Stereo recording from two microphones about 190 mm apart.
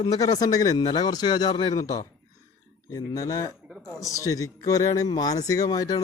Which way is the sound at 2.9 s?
15° left (ahead or behind).